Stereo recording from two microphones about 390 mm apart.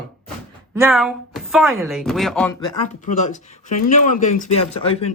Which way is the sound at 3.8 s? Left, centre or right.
Centre.